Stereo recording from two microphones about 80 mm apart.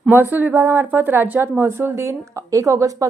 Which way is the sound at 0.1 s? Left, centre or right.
Right.